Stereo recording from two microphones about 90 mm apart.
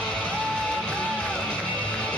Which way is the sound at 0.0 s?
10° left (ahead or behind).